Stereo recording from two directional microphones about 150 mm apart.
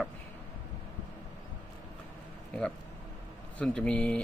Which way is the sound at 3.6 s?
5° left (ahead or behind).